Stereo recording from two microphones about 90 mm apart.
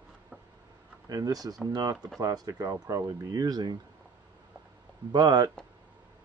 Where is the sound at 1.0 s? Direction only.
45° right (ahead or behind).